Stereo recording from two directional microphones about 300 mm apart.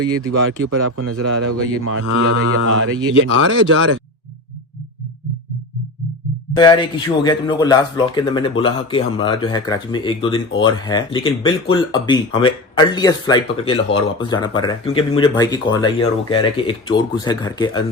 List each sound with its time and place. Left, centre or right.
0.3 s a man's voice: right
6.6 s speech: centre